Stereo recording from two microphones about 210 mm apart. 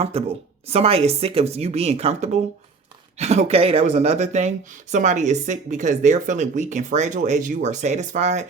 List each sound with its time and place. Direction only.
0.0 s a woman's voice: 25° right (ahead or behind)